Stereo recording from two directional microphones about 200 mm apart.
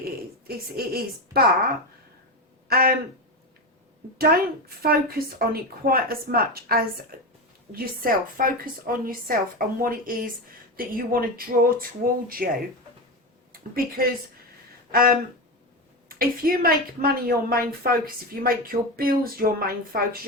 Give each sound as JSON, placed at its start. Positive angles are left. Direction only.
{"t": 0.0, "sound": "speech", "side_deg": -50}
{"t": 4.8, "sound": "a woman's voice", "side_deg": -50}
{"t": 13.5, "sound": "a woman's voice", "side_deg": -45}